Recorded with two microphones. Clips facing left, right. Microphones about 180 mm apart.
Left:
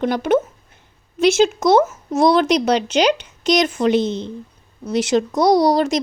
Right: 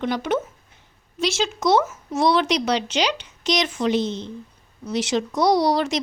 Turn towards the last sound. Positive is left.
turn(degrees=45)  # may be behind; listen again after turning